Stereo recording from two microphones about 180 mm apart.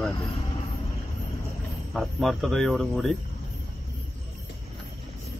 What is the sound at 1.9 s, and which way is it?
Speech, centre (ahead or behind).